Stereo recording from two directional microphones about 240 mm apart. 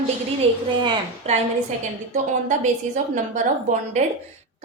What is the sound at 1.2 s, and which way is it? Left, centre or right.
Speech, right.